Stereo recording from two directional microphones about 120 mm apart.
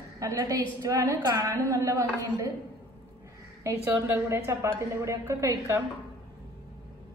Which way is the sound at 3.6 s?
20° right (ahead or behind).